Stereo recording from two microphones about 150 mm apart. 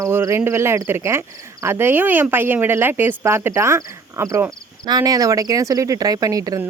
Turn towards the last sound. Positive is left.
turn(degrees=-25)  # may be behind; listen again after turning